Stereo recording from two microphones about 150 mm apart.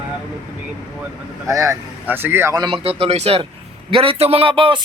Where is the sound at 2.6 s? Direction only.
35° right (ahead or behind).